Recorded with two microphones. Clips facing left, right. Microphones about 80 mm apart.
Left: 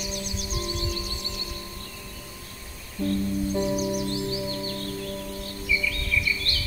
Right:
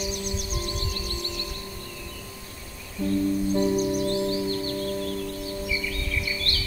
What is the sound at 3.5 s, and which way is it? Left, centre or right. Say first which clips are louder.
Music: right 2 dB; centre.